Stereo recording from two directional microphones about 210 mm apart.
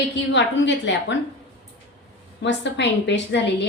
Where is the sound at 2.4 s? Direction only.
55° left (ahead or behind).